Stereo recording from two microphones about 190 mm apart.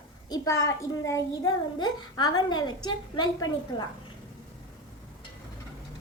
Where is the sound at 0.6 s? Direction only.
15° left (ahead or behind).